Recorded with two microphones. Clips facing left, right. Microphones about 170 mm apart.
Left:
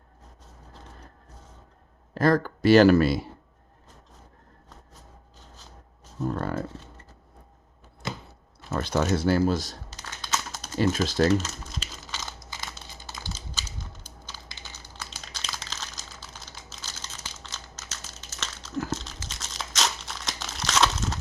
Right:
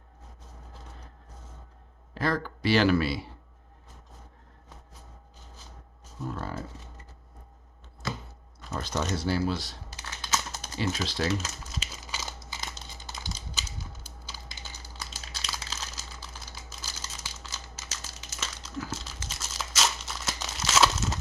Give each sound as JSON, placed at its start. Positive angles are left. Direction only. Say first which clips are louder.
{"t": 2.1, "sound": "a man's voice", "louder": "left 7 dB", "side_deg": 45}
{"t": 6.2, "sound": "speech", "louder": "left 7 dB", "side_deg": 55}
{"t": 8.7, "sound": "a man's voice", "louder": "left 6 dB", "side_deg": 60}
{"t": 9.9, "sound": "computer keyboard", "louder": "even", "side_deg": -5}
{"t": 10.8, "sound": "a man's voice", "louder": "left 7 dB", "side_deg": 45}
{"t": 11.7, "sound": "crumpling", "louder": "left 1 dB", "side_deg": -10}
{"t": 13.2, "sound": "typing", "louder": "left 1 dB", "side_deg": -10}
{"t": 16.5, "sound": "crumpling", "louder": "even", "side_deg": -10}